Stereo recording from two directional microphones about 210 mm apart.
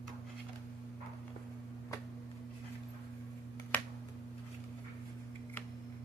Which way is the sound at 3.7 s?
5° left (ahead or behind).